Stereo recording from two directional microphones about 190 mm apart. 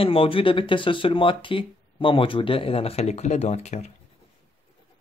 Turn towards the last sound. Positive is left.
turn(degrees=35)  # may be behind; listen again after turning